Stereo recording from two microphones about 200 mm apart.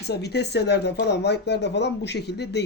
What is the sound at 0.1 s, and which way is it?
A man's voice, 55° left (ahead or behind).